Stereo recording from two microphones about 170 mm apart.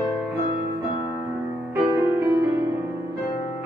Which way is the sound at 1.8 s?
10° right (ahead or behind).